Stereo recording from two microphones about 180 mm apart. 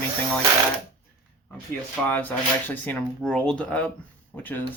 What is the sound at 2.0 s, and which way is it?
Speech, 10° left (ahead or behind).